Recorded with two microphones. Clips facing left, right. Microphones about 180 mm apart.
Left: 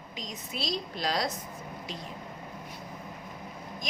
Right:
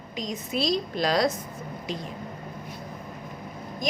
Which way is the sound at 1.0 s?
90° right.